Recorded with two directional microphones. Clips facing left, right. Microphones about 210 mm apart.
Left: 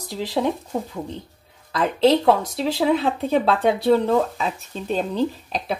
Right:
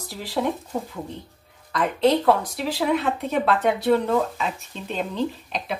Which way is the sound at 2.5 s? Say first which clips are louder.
Left 3 dB; 30° left (ahead or behind).